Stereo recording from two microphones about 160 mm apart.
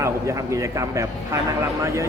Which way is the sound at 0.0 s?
20° right (ahead or behind).